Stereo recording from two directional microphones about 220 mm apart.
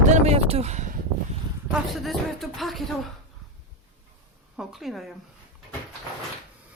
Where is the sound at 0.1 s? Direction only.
30° right (ahead or behind).